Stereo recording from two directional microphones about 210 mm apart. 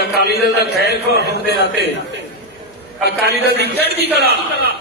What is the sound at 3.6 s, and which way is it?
Speech, 50° right (ahead or behind).